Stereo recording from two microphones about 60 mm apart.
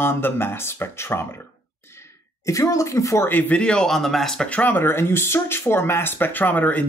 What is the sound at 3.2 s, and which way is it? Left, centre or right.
Speech, left.